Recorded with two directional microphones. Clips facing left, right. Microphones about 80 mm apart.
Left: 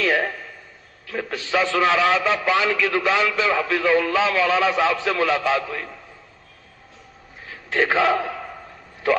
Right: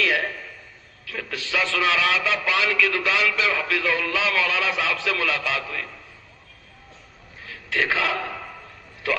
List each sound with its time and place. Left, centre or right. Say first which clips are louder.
0.0 s a sound: left 3 dB; left
1.0 s a man's voice: left 4 dB; left
7.7 s a man's voice: left 5 dB; left